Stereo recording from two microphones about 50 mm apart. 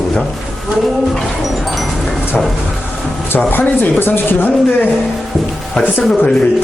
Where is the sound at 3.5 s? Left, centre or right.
Left.